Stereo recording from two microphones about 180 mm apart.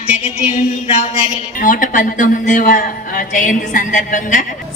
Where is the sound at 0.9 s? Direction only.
40° left (ahead or behind).